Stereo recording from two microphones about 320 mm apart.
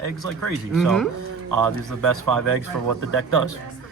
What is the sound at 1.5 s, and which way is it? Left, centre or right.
Speech, right.